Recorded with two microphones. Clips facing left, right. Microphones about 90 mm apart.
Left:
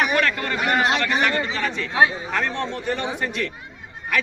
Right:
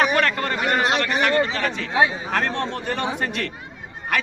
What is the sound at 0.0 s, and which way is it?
Speech, 35° right (ahead or behind).